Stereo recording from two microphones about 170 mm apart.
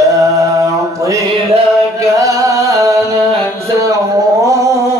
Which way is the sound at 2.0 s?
20° right (ahead or behind).